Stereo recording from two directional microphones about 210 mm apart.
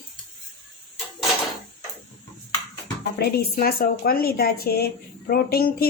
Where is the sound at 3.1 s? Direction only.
45° left (ahead or behind).